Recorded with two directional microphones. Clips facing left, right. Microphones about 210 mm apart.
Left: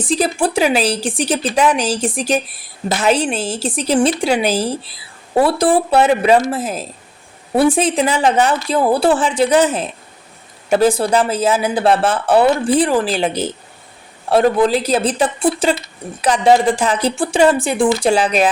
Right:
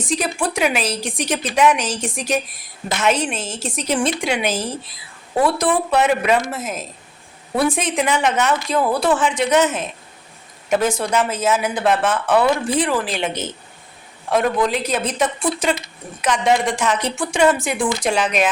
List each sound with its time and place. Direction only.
0.0 s speech: 30° left (ahead or behind)